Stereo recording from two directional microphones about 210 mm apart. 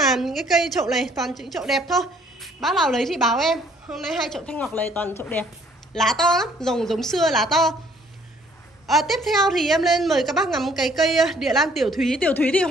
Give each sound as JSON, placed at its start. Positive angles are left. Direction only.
{"t": 0.1, "sound": "a woman's voice", "side_deg": 0}
{"t": 8.8, "sound": "a woman's voice", "side_deg": 0}